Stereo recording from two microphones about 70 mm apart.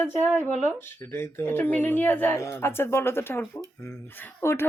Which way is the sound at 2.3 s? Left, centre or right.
Left.